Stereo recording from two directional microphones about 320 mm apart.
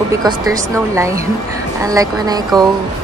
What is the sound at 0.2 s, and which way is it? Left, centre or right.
Speech, centre.